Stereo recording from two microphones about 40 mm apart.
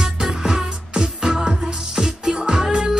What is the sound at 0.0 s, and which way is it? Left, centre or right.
Music, centre.